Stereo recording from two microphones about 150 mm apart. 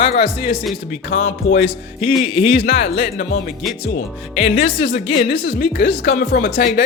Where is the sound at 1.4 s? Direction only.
40° left (ahead or behind).